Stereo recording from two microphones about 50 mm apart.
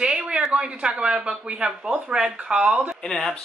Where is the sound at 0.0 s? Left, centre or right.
Centre.